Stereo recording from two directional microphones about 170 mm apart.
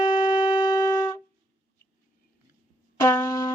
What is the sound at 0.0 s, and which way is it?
Shofar, 25° left (ahead or behind).